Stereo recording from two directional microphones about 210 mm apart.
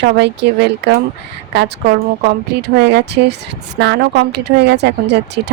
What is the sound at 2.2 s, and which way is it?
A woman's voice, 55° right (ahead or behind).